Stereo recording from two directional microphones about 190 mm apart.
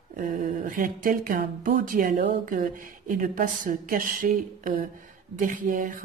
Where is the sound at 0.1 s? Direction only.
45° right (ahead or behind).